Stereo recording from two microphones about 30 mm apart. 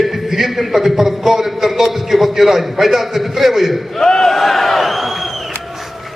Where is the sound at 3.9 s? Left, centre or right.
Centre.